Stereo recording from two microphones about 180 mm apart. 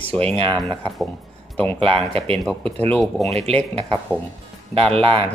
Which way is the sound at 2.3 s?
5° left (ahead or behind).